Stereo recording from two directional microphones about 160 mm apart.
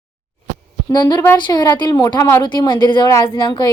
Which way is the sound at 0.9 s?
25° left (ahead or behind).